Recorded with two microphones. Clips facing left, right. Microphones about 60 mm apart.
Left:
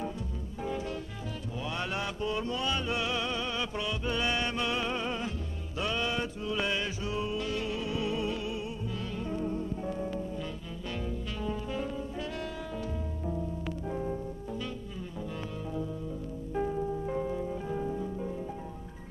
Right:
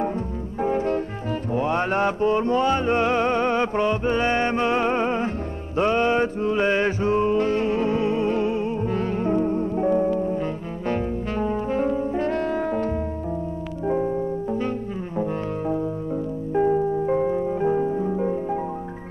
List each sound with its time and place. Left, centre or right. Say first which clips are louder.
0.6 s music: right 13 dB; right
10.9 s brass instrument: right 12 dB; right
13.8 s music: right 14 dB; right
16.5 s music: right 12 dB; right